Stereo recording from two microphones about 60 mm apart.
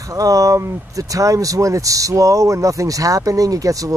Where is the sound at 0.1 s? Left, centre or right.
Right.